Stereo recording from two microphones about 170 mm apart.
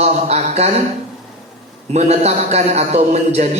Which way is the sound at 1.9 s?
40° right (ahead or behind).